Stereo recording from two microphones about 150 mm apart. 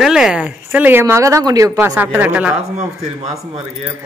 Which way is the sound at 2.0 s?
10° right (ahead or behind).